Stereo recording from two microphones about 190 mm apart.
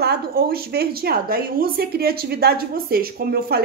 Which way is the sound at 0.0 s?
55° right (ahead or behind).